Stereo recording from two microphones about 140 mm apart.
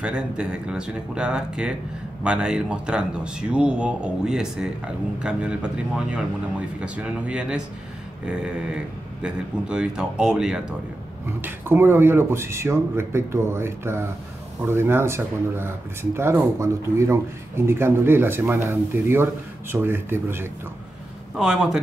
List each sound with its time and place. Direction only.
0.0 s speech: 5° right (ahead or behind)
11.2 s speech: 15° right (ahead or behind)
21.4 s speech: 5° right (ahead or behind)